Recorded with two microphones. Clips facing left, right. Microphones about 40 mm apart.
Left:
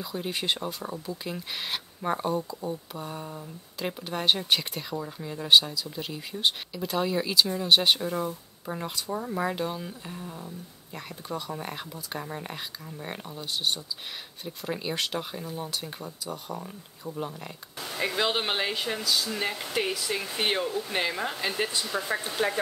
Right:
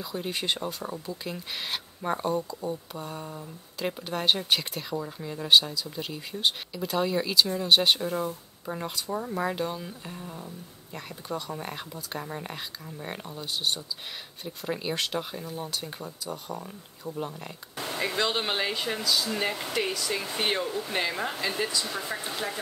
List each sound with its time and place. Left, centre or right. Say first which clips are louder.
0.0 s speech: even; centre
21.9 s speech: left 4 dB; centre
22.4 s speech: left 9 dB; left